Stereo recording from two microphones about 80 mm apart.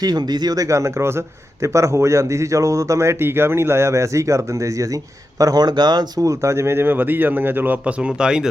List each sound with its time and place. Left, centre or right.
0.0 s a man's voice: right
5.4 s speech: right
6.2 s speech: right; by 8.4 s centre